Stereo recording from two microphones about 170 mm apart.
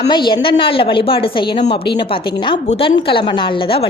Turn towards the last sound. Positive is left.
turn(degrees=30)  # may be behind; listen again after turning